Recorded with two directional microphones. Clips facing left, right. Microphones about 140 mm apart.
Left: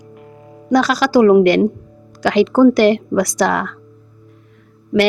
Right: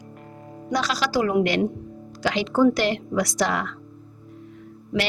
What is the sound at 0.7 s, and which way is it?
Speech, 55° left (ahead or behind).